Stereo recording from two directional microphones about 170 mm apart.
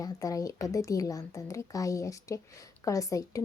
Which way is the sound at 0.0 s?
20° left (ahead or behind).